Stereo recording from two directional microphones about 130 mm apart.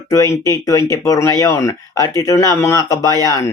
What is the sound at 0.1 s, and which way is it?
Speech, 25° left (ahead or behind).